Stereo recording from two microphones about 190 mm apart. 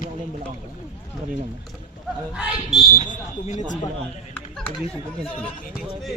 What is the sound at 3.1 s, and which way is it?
Speech, 40° left (ahead or behind).